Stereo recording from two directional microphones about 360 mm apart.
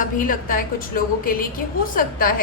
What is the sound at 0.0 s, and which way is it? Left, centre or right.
A woman's voice, left.